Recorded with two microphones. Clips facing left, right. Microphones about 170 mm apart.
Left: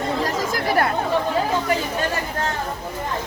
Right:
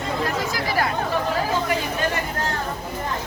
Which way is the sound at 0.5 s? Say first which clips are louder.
Left 3 dB; 55° left (ahead or behind).